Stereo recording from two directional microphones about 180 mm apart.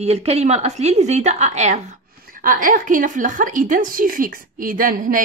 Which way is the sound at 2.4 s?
50° right (ahead or behind).